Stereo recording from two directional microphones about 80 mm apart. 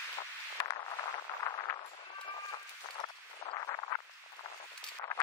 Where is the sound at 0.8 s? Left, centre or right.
Left.